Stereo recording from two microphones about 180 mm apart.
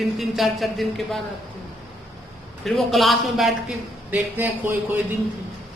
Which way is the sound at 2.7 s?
Centre (ahead or behind).